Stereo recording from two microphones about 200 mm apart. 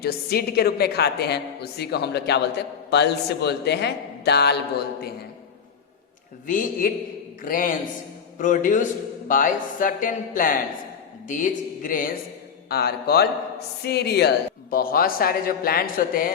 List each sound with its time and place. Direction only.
0.0 s a woman's voice: 50° left (ahead or behind)
6.5 s a woman's voice: 45° left (ahead or behind)